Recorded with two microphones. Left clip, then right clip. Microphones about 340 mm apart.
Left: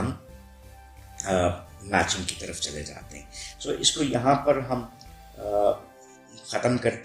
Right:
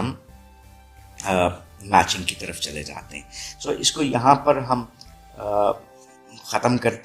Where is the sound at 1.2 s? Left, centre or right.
Right.